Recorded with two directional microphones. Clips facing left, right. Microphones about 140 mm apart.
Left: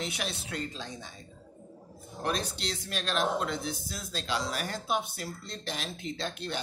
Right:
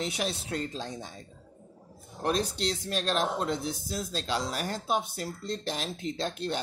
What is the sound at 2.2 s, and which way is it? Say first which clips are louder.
Speech: right 4 dB; 40° right (ahead or behind).